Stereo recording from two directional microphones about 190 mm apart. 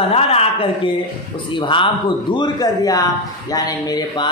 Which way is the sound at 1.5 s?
25° left (ahead or behind).